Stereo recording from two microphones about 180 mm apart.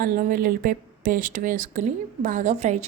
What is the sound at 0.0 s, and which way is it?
Speech, 50° right (ahead or behind).